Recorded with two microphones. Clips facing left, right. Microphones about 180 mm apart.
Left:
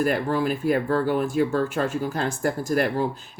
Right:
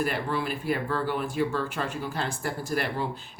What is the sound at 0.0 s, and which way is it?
Speech, 45° left (ahead or behind).